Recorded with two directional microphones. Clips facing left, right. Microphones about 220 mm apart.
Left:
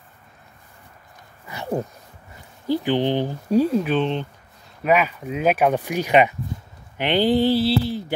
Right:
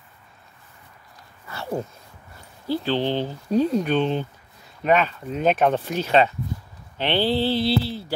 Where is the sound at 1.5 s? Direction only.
15° left (ahead or behind).